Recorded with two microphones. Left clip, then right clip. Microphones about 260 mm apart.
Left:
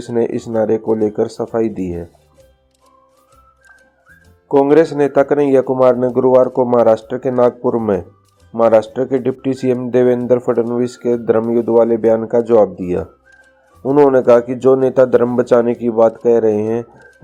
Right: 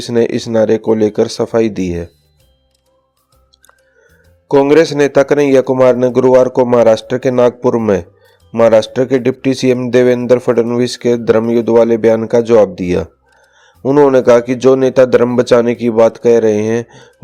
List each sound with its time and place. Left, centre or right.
0.0 s speech: right
4.4 s speech: right